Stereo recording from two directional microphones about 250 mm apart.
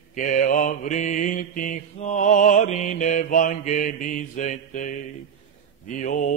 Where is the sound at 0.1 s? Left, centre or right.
Left.